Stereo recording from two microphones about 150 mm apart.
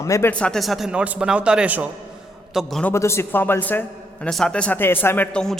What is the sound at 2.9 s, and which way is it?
A man's voice, 15° left (ahead or behind).